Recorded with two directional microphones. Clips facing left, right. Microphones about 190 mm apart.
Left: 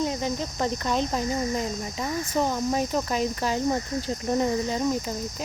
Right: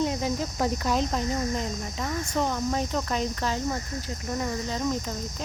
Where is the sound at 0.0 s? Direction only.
Centre (ahead or behind).